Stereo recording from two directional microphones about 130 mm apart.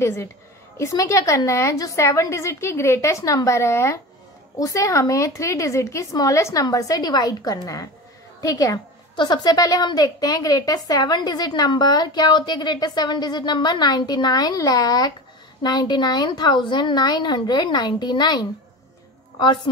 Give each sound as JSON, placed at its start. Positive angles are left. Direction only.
{"t": 0.0, "sound": "a woman's voice", "side_deg": 20}